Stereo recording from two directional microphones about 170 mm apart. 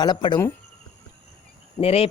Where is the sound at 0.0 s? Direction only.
25° left (ahead or behind).